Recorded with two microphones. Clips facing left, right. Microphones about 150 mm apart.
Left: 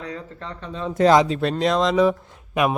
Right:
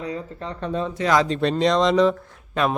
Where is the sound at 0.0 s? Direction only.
10° right (ahead or behind).